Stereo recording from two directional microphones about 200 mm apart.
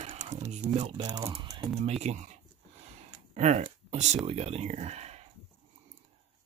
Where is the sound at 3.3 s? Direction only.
35° right (ahead or behind).